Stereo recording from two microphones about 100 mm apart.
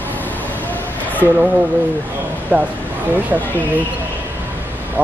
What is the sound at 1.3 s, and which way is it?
Speech, 15° right (ahead or behind).